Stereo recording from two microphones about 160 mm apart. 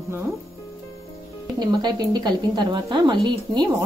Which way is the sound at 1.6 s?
25° right (ahead or behind).